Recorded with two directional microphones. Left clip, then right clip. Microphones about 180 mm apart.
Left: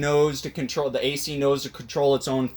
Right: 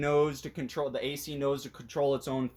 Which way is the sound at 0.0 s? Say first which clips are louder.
Left 6 dB; 20° right (ahead or behind).